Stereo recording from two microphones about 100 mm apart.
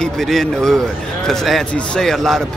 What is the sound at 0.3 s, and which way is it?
Speech, 5° left (ahead or behind).